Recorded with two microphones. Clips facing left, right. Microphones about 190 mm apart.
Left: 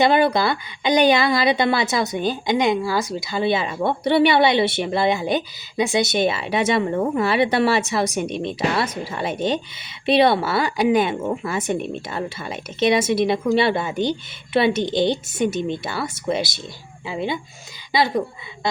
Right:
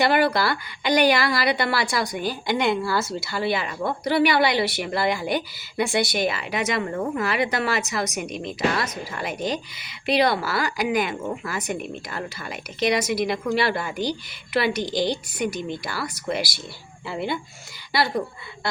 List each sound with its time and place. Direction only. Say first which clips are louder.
0.0 s a woman's voice: left 3 dB; 20° left (ahead or behind)